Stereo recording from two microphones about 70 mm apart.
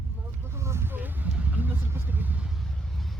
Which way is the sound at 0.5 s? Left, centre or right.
Right.